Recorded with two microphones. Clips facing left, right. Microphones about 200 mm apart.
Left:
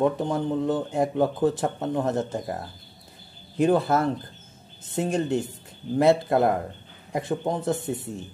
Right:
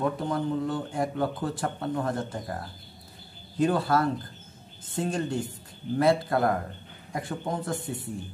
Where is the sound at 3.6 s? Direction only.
20° left (ahead or behind).